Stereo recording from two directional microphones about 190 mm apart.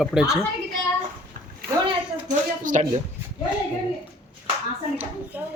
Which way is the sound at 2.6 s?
40° right (ahead or behind).